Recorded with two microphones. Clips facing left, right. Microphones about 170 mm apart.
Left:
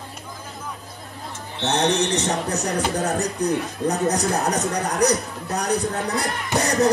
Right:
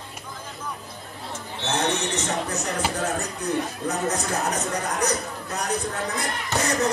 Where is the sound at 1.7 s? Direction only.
35° left (ahead or behind).